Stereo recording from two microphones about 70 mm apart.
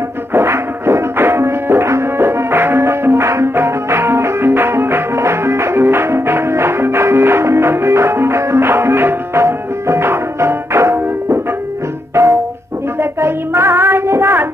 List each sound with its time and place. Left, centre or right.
0.3 s music: right
13.2 s child singing: right